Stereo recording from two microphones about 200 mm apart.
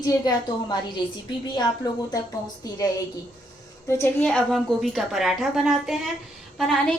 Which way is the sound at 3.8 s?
10° left (ahead or behind).